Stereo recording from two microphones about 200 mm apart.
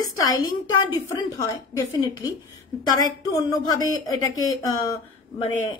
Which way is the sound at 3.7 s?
20° left (ahead or behind).